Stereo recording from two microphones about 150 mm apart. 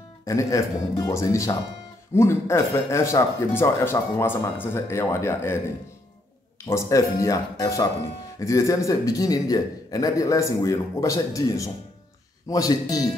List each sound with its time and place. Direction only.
0.2 s a man's voice: 20° left (ahead or behind)
6.7 s a man's voice: 20° left (ahead or behind)